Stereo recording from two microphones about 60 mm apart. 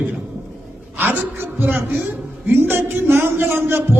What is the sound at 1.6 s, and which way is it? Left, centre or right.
A woman's voice, right.